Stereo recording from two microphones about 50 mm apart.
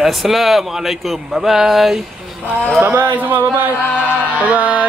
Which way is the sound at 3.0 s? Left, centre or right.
Right.